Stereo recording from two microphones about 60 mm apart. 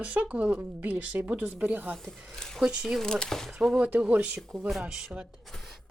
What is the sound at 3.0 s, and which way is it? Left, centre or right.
Speech, centre.